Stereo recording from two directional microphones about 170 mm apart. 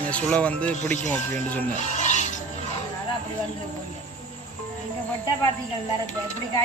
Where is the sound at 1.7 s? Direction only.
45° left (ahead or behind).